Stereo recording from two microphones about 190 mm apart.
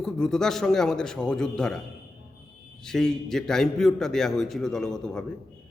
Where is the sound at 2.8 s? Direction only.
5° left (ahead or behind).